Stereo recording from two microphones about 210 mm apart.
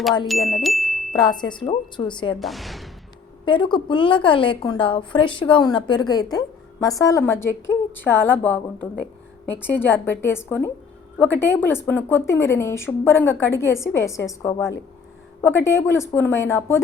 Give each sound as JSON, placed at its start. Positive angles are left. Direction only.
{"t": 0.3, "sound": "chime", "side_deg": 0}
{"t": 1.1, "sound": "a woman's voice", "side_deg": 20}
{"t": 2.4, "sound": "a sound", "side_deg": 0}
{"t": 3.4, "sound": "a woman's voice", "side_deg": 20}